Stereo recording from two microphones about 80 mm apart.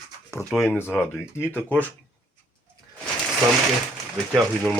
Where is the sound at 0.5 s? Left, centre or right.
Left.